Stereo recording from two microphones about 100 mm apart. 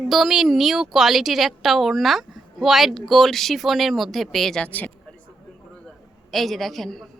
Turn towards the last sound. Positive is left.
turn(degrees=5)  # may be behind; listen again after turning